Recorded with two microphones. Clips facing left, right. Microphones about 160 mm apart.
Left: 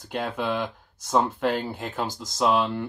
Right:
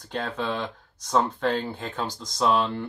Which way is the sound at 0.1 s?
10° left (ahead or behind).